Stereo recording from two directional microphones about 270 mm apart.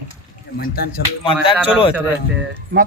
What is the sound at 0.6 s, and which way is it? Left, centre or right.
Speech, left.